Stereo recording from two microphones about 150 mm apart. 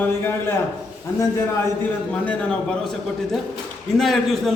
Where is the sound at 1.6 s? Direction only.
10° left (ahead or behind).